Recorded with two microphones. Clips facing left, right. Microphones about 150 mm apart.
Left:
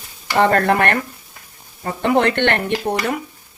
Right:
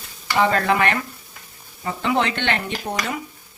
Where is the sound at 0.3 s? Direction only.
55° left (ahead or behind).